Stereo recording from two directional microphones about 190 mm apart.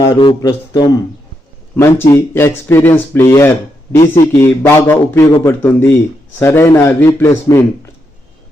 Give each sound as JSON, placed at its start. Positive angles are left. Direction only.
{"t": 0.0, "sound": "speech", "side_deg": 20}